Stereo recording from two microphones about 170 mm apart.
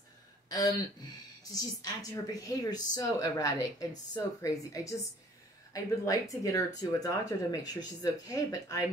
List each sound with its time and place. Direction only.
0.5 s a woman's voice: 20° left (ahead or behind)